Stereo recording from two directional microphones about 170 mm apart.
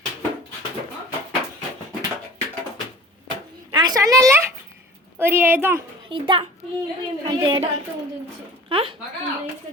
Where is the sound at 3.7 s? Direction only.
25° right (ahead or behind).